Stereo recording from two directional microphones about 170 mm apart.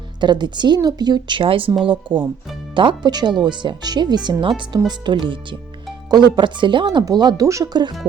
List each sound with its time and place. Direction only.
0.2 s speech: 25° right (ahead or behind)